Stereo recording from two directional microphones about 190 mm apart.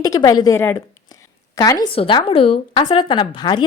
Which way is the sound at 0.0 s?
20° left (ahead or behind).